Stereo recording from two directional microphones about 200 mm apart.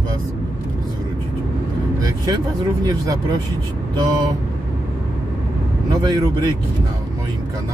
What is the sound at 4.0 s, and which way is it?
Speech, 20° right (ahead or behind).